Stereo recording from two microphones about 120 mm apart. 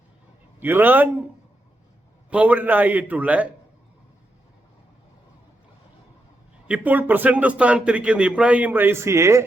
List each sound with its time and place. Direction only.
0.6 s speech: 15° right (ahead or behind)
2.3 s speech: 10° right (ahead or behind)
6.7 s speech: 10° right (ahead or behind)